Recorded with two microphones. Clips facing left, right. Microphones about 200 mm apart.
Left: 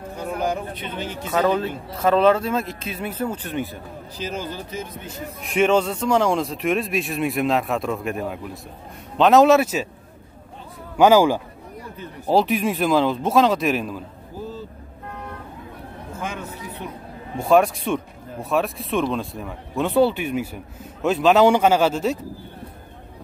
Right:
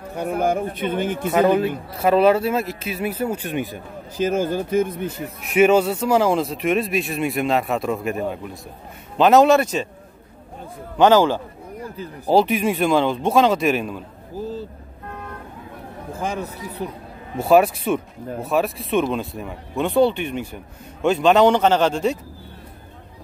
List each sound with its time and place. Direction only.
0.1 s speech: 55° right (ahead or behind)
1.2 s speech: 10° right (ahead or behind)
4.2 s speech: 50° right (ahead or behind)
5.4 s speech: 5° right (ahead or behind)
11.0 s a man's voice: 10° left (ahead or behind)
12.3 s speech: centre (ahead or behind)
16.1 s a man's voice: 35° right (ahead or behind)
17.4 s speech: 5° right (ahead or behind)